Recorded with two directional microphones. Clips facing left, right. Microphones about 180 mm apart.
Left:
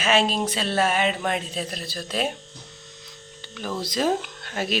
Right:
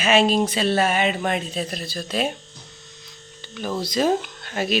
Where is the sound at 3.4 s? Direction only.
5° right (ahead or behind).